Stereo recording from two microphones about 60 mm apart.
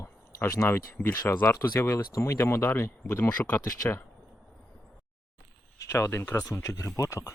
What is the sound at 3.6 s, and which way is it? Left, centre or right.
Speech, left.